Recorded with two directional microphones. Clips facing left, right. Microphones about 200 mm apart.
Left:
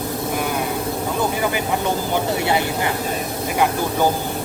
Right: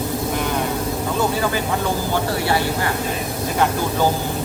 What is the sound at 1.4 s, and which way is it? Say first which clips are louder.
Speech: even; 15° left (ahead or behind).